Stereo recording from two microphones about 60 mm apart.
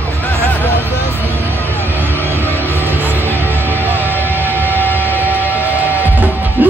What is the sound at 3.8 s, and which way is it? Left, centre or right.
Music, right.